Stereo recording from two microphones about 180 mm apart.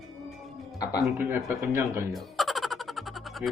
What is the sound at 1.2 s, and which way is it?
Speech, 10° right (ahead or behind).